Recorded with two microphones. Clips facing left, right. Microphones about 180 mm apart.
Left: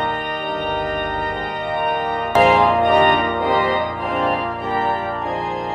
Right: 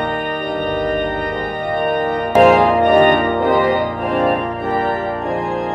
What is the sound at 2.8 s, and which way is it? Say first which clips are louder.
Organ: right 4 dB; 50° right (ahead or behind).